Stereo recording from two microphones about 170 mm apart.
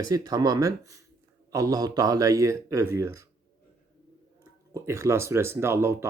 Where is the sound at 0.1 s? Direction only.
20° right (ahead or behind).